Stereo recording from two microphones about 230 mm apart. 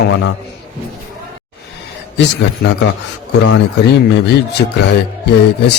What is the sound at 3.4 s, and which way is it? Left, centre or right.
A man's voice, left.